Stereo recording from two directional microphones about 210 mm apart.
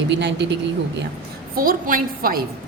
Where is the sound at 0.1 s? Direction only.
55° right (ahead or behind).